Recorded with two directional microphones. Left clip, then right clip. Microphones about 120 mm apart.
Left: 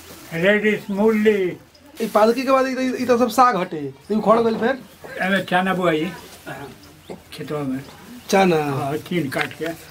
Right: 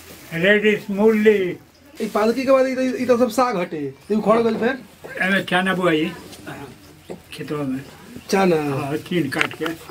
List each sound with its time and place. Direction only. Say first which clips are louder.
0.3 s a man's voice: right 1 dB; centre (ahead or behind)
2.1 s a man's voice: left 1 dB; 25° left (ahead or behind)
4.1 s speech: left 1 dB; 5° left (ahead or behind)
5.1 s a man's voice: even; 5° right (ahead or behind)
7.3 s a man's voice: even; centre (ahead or behind)
8.3 s a man's voice: left 1 dB; 25° left (ahead or behind)
8.7 s a man's voice: even; 5° left (ahead or behind)